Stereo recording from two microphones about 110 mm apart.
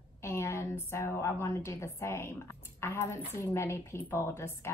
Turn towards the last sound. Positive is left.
turn(degrees=25)  # may be behind; listen again after turning